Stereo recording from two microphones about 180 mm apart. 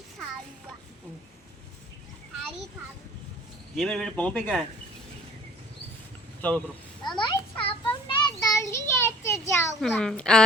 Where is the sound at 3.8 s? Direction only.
Centre (ahead or behind).